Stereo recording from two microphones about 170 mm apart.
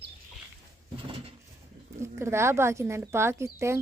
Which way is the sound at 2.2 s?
15° right (ahead or behind).